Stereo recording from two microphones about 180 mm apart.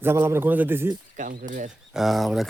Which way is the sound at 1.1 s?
45° right (ahead or behind).